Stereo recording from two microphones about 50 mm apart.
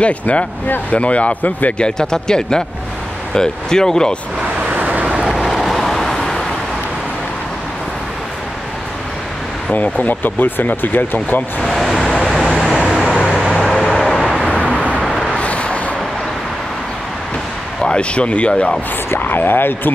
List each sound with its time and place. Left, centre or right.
0.0 s speech: left
1.8 s speech: centre
4.6 s vehicle: right
5.3 s vehicle: centre
9.8 s speech: left
11.6 s vehicle: centre
13.2 s vehicle: centre
13.9 s vehicle: centre
15.0 s vehicle: centre
15.3 s vehicle: left
17.8 s speech: left
19.0 s speech: left